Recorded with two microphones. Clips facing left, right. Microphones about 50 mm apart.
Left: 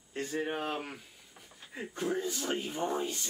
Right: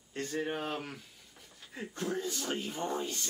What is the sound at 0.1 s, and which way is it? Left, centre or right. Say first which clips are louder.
Speech: left 1 dB; centre.